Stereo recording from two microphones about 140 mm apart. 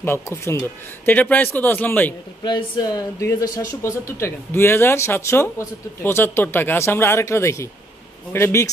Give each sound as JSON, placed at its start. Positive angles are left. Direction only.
{"t": 0.0, "sound": "speech", "side_deg": 15}
{"t": 2.4, "sound": "speech", "side_deg": 30}